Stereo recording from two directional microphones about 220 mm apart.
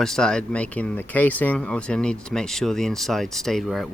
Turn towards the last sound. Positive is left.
turn(degrees=0)  # may be behind; listen again after turning